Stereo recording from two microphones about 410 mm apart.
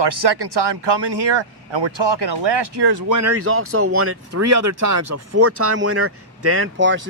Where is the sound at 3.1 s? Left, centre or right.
Right.